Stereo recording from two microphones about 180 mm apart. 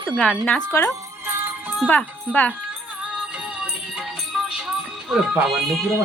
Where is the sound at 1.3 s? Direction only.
10° right (ahead or behind).